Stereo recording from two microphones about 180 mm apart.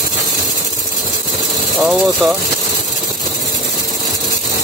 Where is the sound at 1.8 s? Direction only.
5° right (ahead or behind).